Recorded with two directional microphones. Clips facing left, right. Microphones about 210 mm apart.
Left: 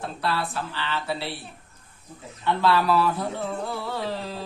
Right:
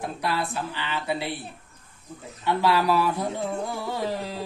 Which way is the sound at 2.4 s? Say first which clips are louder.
Even; 15° right (ahead or behind).